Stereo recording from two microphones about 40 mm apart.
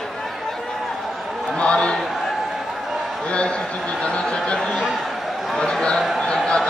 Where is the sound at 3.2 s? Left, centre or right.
Left.